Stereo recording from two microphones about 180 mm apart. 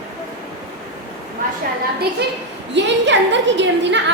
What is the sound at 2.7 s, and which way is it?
A woman's voice, 80° right.